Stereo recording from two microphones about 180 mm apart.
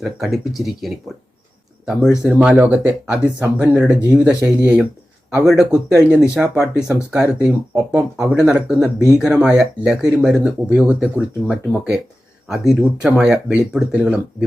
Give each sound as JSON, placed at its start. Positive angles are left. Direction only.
{"t": 0.0, "sound": "speech", "side_deg": 0}